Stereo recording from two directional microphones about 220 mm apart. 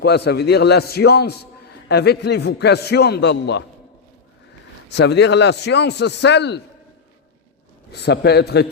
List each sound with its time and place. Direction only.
0.0 s a man's voice: 50° left (ahead or behind)
4.9 s a man's voice: 50° left (ahead or behind)
7.9 s a man's voice: 50° left (ahead or behind)